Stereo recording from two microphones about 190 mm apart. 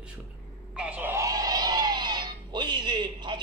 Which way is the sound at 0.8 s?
10° right (ahead or behind).